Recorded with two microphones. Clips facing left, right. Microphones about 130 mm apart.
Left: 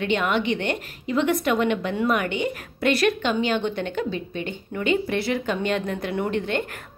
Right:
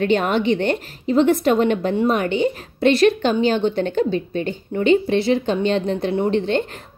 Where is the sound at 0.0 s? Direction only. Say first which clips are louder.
Right 5 dB; 40° right (ahead or behind).